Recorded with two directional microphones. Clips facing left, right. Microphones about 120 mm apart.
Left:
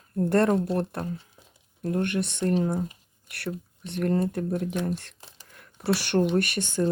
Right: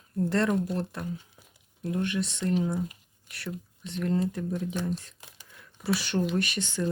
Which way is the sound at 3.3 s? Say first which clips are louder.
Left 4 dB; 65° left (ahead or behind).